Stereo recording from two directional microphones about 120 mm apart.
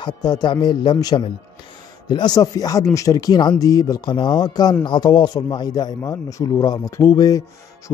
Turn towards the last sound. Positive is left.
turn(degrees=30)  # may be behind; listen again after turning